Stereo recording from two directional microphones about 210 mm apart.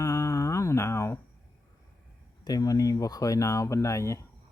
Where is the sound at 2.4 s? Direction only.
15° left (ahead or behind).